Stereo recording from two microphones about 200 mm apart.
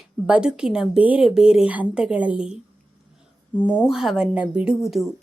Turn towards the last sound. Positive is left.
turn(degrees=-5)  # may be behind; listen again after turning